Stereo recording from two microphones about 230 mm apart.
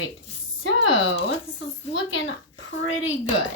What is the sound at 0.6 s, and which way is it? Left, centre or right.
A woman's voice, left.